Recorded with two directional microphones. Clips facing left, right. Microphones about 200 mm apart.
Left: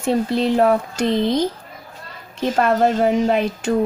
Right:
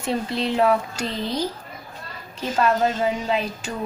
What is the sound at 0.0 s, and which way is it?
Speech, 50° left (ahead or behind).